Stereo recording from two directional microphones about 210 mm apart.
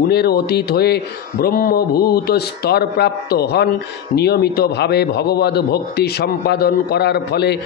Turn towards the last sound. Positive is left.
turn(degrees=50)  # may be behind; listen again after turning